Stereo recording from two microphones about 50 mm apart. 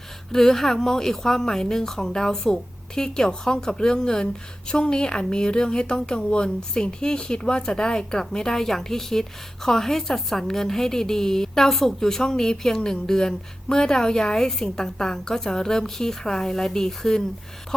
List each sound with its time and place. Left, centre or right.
0.3 s a woman's voice: centre